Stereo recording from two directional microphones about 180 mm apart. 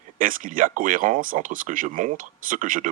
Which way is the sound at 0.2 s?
50° right (ahead or behind).